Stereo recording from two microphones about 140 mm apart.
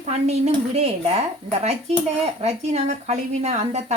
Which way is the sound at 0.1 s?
50° right (ahead or behind).